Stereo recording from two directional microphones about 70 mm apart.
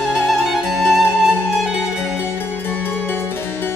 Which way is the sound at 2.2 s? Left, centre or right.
Left.